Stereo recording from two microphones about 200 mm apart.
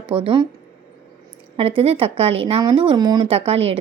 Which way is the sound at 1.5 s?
30° right (ahead or behind).